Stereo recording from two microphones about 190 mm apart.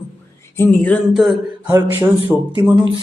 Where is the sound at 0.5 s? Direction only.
10° left (ahead or behind).